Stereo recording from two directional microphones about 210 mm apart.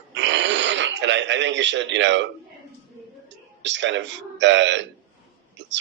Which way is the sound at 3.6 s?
60° right (ahead or behind).